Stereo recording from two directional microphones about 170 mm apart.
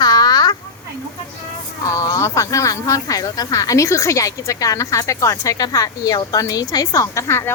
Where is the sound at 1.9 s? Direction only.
20° left (ahead or behind).